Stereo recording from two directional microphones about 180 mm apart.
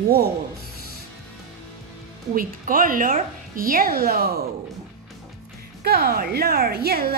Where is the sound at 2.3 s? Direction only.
50° right (ahead or behind).